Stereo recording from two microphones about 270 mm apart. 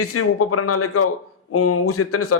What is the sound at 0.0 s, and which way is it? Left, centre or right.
A man's voice, left.